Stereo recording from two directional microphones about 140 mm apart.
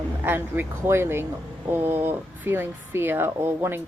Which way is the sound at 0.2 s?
15° right (ahead or behind).